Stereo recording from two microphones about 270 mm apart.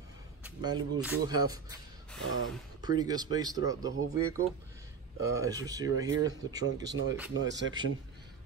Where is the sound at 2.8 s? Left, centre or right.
Centre.